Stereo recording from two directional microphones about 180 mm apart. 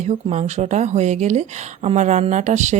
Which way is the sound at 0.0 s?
40° right (ahead or behind).